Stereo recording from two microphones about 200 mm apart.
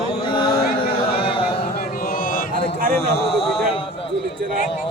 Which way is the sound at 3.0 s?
30° left (ahead or behind).